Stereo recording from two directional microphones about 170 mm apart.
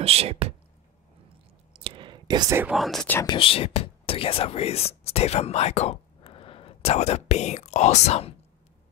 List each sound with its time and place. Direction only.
0.0 s speech: 35° right (ahead or behind)
1.7 s whispering: 30° right (ahead or behind)
2.7 s speech: centre (ahead or behind)
3.2 s speech: 30° left (ahead or behind)